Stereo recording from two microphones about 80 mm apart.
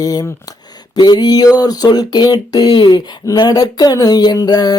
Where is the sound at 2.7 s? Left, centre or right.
Left.